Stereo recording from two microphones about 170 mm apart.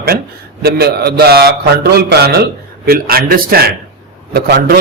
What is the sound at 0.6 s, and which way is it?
A man's voice, 70° right (ahead or behind).